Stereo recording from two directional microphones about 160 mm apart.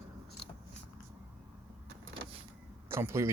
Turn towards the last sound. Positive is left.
turn(degrees=-15)  # may be behind; listen again after turning